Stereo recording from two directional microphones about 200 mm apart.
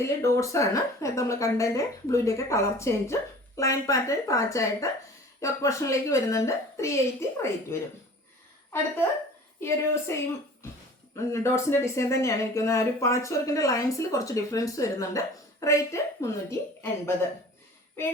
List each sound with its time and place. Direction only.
0.0 s speech: 15° left (ahead or behind)
9.6 s speech: 15° left (ahead or behind)